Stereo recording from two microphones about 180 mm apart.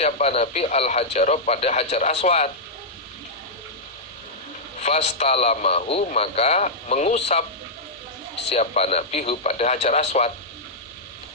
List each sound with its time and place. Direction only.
0.0 s speech: 35° left (ahead or behind)
4.8 s speech: 35° left (ahead or behind)
8.4 s speech: 35° left (ahead or behind)